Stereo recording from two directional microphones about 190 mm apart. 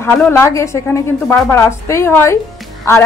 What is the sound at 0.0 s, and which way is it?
A woman's voice, 10° left (ahead or behind).